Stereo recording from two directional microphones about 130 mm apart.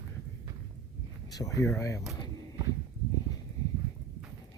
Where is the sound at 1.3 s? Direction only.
25° left (ahead or behind).